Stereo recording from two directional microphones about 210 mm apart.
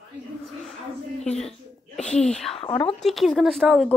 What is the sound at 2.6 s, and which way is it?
Speech, 25° left (ahead or behind).